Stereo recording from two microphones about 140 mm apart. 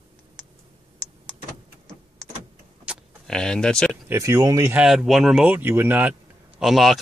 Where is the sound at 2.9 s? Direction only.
10° right (ahead or behind).